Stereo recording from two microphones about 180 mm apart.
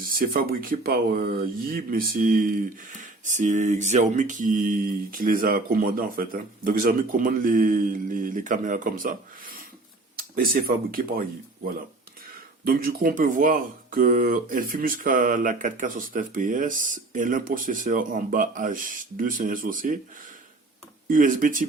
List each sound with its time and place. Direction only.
0.0 s speech: 50° right (ahead or behind)
12.6 s speech: 55° right (ahead or behind)
21.1 s speech: 50° right (ahead or behind)